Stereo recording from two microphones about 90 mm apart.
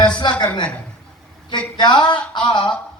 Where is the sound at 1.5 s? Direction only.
55° left (ahead or behind).